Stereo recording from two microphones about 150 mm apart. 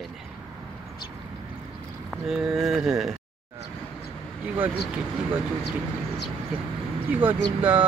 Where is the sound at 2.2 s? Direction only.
5° right (ahead or behind).